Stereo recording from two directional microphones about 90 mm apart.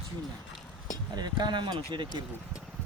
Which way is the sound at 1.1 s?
55° right (ahead or behind).